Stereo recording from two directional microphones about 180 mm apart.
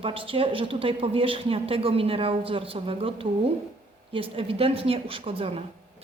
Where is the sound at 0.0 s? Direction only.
30° right (ahead or behind).